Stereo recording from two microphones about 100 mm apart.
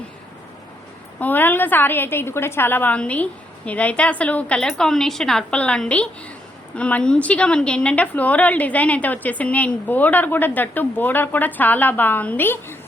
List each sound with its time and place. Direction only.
1.2 s a woman's voice: 20° left (ahead or behind)